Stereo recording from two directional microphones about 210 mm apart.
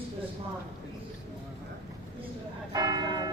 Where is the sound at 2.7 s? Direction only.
20° right (ahead or behind).